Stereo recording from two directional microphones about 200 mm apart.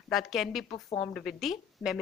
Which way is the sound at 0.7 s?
20° left (ahead or behind).